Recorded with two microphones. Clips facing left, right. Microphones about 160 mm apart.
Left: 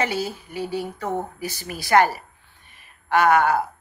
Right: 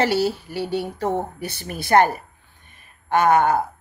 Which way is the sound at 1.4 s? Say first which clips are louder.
Even; 60° right (ahead or behind).